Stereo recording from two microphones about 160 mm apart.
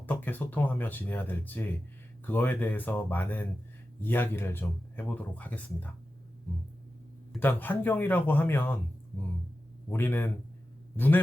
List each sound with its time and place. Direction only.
0.0 s speech: 10° left (ahead or behind)
7.3 s speech: 10° left (ahead or behind)
9.9 s a man's voice: 15° left (ahead or behind)